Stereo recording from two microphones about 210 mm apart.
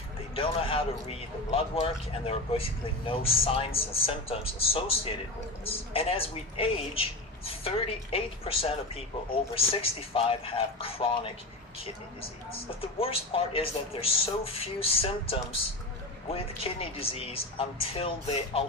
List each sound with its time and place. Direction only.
0.3 s speech: 25° left (ahead or behind)
12.5 s speech: 25° left (ahead or behind)